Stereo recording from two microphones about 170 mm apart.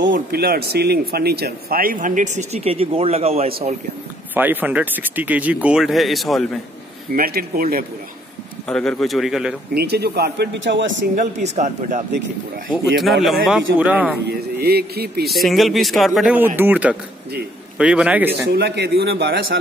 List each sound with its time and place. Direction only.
0.1 s speech: 65° right (ahead or behind); by 3.5 s 35° right (ahead or behind)
4.3 s speech: 10° right (ahead or behind)
7.2 s speech: 60° right (ahead or behind)
8.6 s speech: 5° left (ahead or behind)
9.8 s speech: 70° right (ahead or behind); by 11.0 s 90° right
11.1 s speech: 45° right (ahead or behind)
13.2 s speech: centre (ahead or behind)
14.6 s speech: 70° right (ahead or behind)
15.2 s speech: centre (ahead or behind)
18.5 s speech: 70° right (ahead or behind)